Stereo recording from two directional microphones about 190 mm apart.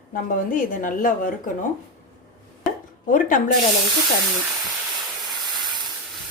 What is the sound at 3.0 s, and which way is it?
Speech, 45° left (ahead or behind).